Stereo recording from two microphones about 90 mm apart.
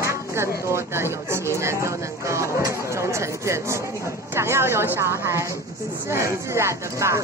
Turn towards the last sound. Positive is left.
turn(degrees=-30)  # may be behind; listen again after turning